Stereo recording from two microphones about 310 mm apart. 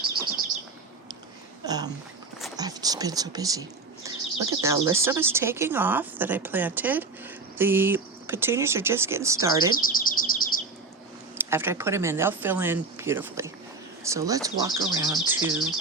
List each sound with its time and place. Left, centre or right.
1.6 s speech: centre
9.7 s chirp: left
11.5 s speech: centre